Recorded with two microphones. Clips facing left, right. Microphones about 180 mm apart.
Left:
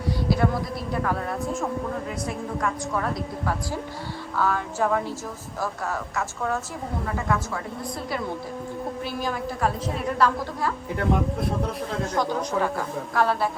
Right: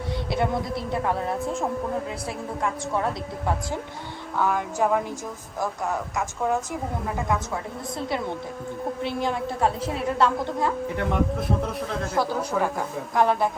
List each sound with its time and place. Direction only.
0.1 s speech: 25° right (ahead or behind)
2.6 s a woman's voice: 25° right (ahead or behind)
4.4 s a woman's voice: 15° right (ahead or behind)
9.0 s a woman's voice: 25° right (ahead or behind)
10.9 s a woman's voice: centre (ahead or behind); by 13.5 s 20° right (ahead or behind)